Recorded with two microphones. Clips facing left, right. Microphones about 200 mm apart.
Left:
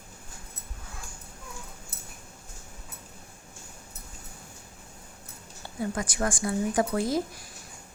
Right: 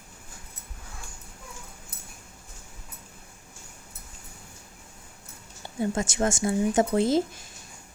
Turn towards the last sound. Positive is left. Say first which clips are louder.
# right 5 dB
turn(degrees=-25)  # may be behind; listen again after turning